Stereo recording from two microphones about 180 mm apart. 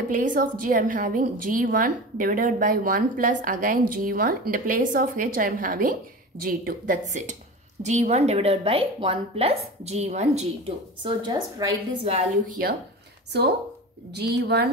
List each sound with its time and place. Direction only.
0.1 s a woman's voice: 50° right (ahead or behind)
11.0 s a woman's voice: 25° right (ahead or behind)
12.4 s speech: 55° right (ahead or behind)
14.1 s a woman's voice: 65° right (ahead or behind)